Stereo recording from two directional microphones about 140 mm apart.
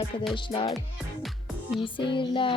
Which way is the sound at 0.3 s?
35° left (ahead or behind).